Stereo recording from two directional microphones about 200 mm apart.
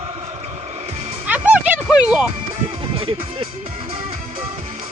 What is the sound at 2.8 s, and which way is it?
Speech, 25° right (ahead or behind).